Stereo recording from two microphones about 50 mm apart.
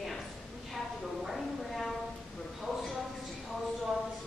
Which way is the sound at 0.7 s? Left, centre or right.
Centre.